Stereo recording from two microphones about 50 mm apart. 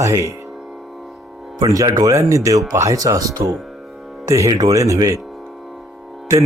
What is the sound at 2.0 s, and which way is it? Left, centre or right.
Speech, right.